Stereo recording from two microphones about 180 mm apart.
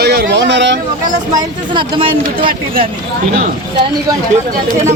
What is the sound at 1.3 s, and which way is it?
Speech, 25° right (ahead or behind).